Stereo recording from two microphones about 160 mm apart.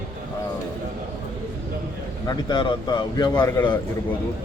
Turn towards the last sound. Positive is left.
turn(degrees=25)  # may be behind; listen again after turning